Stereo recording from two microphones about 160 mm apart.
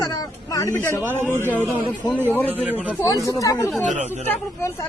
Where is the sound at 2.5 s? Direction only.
10° right (ahead or behind).